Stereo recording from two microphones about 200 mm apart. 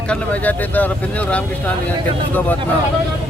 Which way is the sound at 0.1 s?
10° left (ahead or behind).